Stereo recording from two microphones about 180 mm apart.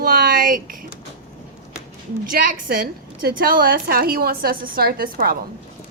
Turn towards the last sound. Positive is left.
turn(degrees=-55)  # may be behind; listen again after turning